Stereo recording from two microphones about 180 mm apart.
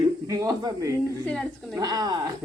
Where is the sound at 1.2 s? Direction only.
5° left (ahead or behind).